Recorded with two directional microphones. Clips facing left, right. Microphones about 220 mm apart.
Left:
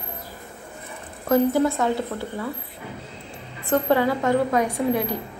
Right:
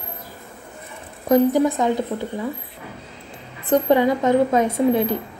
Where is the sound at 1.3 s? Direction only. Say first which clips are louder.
Right 3 dB; 15° right (ahead or behind).